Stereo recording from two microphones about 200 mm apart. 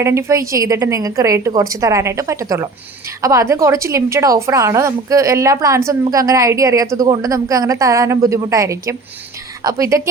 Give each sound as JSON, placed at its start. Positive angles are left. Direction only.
{"t": 0.0, "sound": "a woman's voice", "side_deg": -15}